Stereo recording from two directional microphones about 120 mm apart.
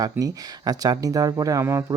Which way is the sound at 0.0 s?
35° right (ahead or behind).